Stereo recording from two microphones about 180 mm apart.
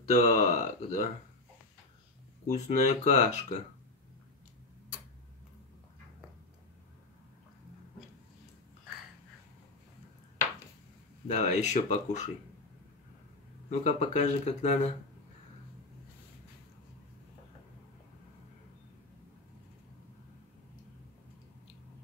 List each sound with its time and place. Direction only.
0.0 s speech: 40° left (ahead or behind)
2.4 s speech: 40° left (ahead or behind)
11.2 s speech: 40° left (ahead or behind)
13.7 s speech: 40° left (ahead or behind)